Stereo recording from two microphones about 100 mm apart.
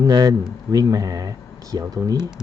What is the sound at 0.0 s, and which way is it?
Speech, 40° right (ahead or behind).